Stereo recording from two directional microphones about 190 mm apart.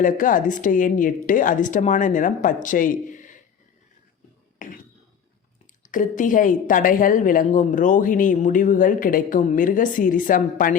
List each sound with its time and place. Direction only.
0.0 s a woman's voice: 45° left (ahead or behind)
4.6 s a sound: 45° left (ahead or behind)
5.9 s a woman's voice: 45° left (ahead or behind)